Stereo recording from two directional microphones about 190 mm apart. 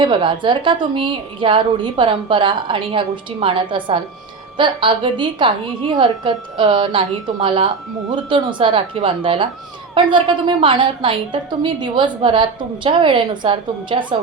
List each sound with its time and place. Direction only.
0.0 s a woman's voice: 25° right (ahead or behind)